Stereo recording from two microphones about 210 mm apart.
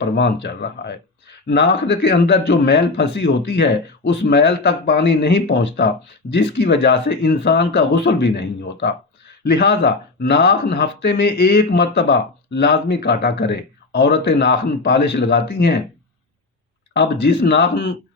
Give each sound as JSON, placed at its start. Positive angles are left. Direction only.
{"t": 0.0, "sound": "speech", "side_deg": 55}
{"t": 16.9, "sound": "speech", "side_deg": 55}